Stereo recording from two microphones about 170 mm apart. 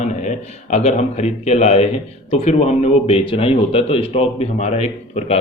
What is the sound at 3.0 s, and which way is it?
A man's voice, 30° left (ahead or behind).